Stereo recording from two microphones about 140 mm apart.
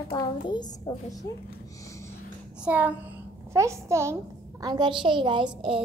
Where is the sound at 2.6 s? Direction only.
10° right (ahead or behind).